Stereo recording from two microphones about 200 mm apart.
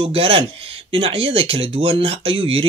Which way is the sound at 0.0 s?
25° right (ahead or behind).